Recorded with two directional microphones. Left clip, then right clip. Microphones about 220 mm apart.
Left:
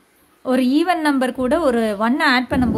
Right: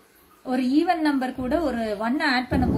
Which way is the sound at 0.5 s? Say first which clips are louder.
Left 5 dB; 40° left (ahead or behind).